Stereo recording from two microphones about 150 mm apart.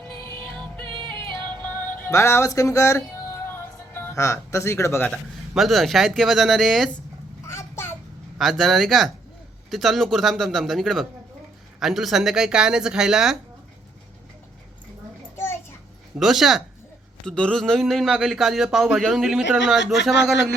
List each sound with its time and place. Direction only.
0.2 s music: 20° left (ahead or behind)
3.9 s speech: 15° left (ahead or behind)
5.1 s a man's voice: centre (ahead or behind)
7.4 s a sound: 15° left (ahead or behind)
8.4 s a man's voice: centre (ahead or behind)
16.1 s a man's voice: centre (ahead or behind)